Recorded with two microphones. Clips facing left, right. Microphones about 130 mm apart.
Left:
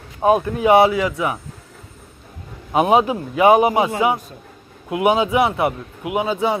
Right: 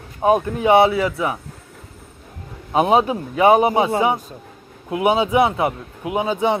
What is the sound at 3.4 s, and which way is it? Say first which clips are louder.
Speech: left 1 dB; 30° right (ahead or behind).